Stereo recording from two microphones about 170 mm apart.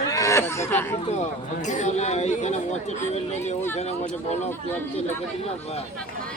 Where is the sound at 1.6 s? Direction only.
45° left (ahead or behind).